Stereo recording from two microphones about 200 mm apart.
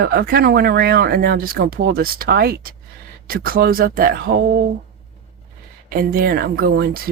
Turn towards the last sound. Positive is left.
turn(degrees=-50)  # may be behind; listen again after turning